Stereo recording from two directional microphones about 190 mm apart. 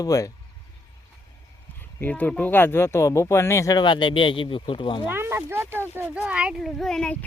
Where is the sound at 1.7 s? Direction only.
10° left (ahead or behind); by 5.1 s 25° left (ahead or behind).